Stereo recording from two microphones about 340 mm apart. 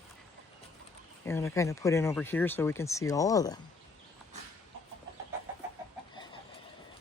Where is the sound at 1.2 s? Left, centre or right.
Centre.